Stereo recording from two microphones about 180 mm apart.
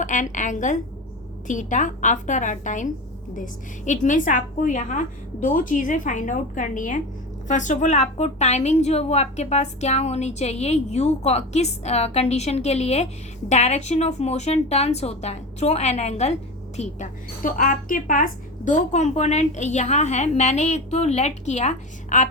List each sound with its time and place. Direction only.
0.0 s a woman's voice: 45° left (ahead or behind)